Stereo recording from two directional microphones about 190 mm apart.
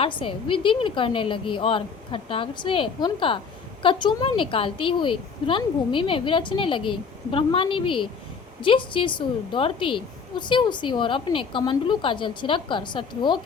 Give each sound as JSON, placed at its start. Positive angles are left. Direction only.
{"t": 0.0, "sound": "a woman's voice", "side_deg": 25}